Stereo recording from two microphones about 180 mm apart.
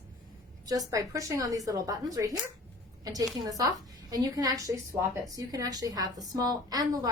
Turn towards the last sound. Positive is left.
turn(degrees=-20)  # may be behind; listen again after turning